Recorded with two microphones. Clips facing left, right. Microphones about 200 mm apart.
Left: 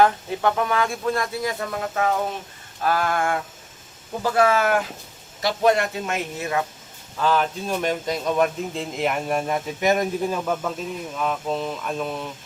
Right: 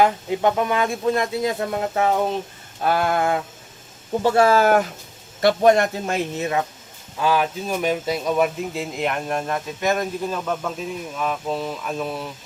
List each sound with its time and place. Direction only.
0.0 s speech: 20° right (ahead or behind); by 4.8 s 35° right (ahead or behind)
5.4 s a man's voice: 55° right (ahead or behind)
6.1 s speech: 20° right (ahead or behind)
7.2 s speech: 10° right (ahead or behind)